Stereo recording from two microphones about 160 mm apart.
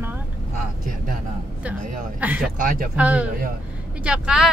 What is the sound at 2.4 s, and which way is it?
Speech, 60° right (ahead or behind).